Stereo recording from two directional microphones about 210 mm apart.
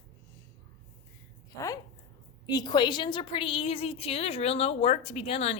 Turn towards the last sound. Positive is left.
turn(degrees=30)  # may be behind; listen again after turning